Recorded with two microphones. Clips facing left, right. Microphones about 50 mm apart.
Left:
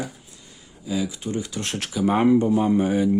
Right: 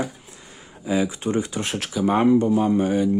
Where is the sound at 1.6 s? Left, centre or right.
Centre.